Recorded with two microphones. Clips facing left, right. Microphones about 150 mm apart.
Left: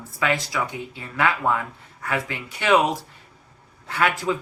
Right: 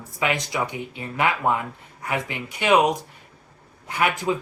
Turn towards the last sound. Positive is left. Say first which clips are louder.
# even
turn(degrees=-15)  # may be behind; listen again after turning